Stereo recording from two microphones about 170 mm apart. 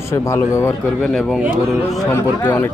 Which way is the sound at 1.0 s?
Centre (ahead or behind).